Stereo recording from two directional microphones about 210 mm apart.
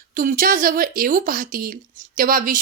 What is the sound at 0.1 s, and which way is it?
Speech, 40° right (ahead or behind).